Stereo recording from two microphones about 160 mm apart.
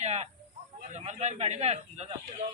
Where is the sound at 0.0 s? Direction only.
40° right (ahead or behind).